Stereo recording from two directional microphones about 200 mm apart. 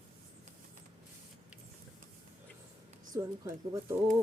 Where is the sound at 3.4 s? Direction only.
15° right (ahead or behind).